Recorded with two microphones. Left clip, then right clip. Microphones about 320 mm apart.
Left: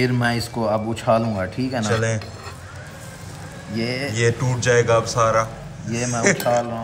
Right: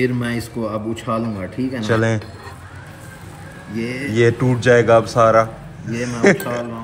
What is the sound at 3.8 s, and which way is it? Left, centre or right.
Speech, left.